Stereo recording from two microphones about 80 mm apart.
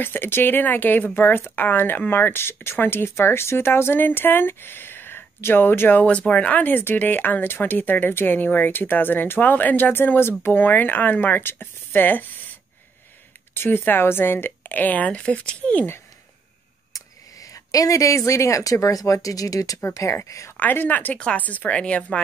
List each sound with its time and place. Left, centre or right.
0.0 s speech: left
13.6 s speech: left
16.9 s speech: left
20.5 s speech: left